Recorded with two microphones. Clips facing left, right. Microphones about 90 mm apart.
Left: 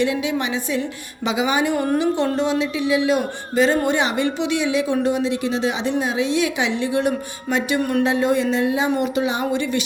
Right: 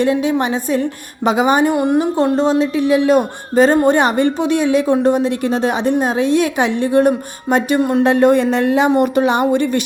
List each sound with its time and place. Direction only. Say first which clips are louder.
0.0 s speech: right 6 dB; 40° right (ahead or behind)
1.7 s a woman's voice: right 5 dB; 20° right (ahead or behind)
2.3 s speech: right 6 dB; 35° right (ahead or behind)
7.8 s a woman's voice: right 5 dB; 25° right (ahead or behind)
8.0 s speech: right 7 dB; 55° right (ahead or behind)